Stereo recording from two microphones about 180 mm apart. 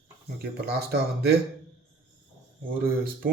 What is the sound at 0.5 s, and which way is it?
Speech, 65° right (ahead or behind).